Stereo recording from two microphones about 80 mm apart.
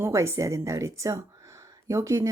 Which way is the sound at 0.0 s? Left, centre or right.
Right.